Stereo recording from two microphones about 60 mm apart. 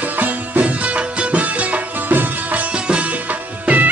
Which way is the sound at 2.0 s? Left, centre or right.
Right.